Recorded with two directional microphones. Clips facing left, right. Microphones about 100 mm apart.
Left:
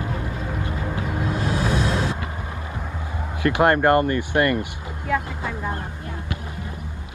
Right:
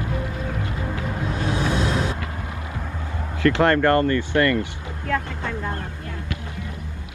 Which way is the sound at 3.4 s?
20° left (ahead or behind).